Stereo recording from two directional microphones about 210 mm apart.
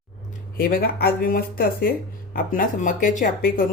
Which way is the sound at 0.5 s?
45° left (ahead or behind).